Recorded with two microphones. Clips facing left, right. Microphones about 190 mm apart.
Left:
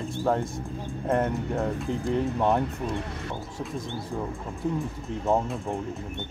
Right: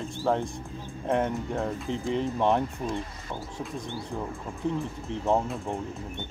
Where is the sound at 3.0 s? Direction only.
70° left (ahead or behind).